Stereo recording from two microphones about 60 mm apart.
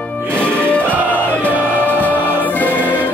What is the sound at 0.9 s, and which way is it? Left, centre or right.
Music, right.